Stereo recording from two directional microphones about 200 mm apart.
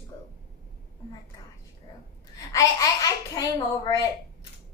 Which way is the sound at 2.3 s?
15° left (ahead or behind).